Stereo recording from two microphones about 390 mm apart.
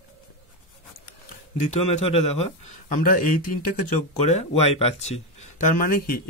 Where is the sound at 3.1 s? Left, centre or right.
Left.